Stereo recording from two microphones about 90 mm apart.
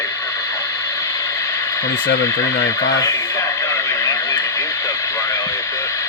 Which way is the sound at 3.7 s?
35° left (ahead or behind).